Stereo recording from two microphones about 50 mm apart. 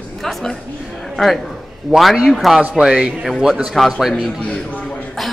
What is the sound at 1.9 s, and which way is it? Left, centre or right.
Speech, centre.